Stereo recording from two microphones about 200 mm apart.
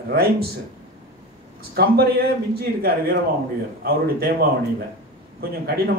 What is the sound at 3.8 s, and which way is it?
Speech, 50° right (ahead or behind).